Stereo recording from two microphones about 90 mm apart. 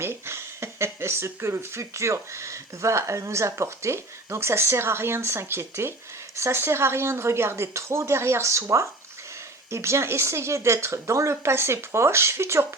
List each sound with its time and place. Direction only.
0.0 s speech: 30° right (ahead or behind)